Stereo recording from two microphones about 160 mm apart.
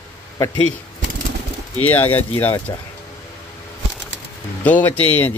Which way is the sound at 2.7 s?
25° left (ahead or behind).